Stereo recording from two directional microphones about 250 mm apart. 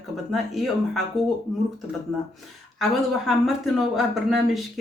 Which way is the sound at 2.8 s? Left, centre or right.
Centre.